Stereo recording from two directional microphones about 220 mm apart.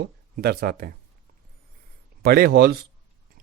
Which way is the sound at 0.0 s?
45° right (ahead or behind).